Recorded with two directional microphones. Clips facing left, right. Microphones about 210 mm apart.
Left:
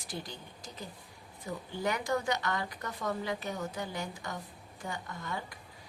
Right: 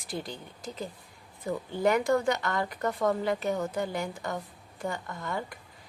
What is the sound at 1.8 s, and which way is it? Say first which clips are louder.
Speech: right 8 dB; 55° right (ahead or behind).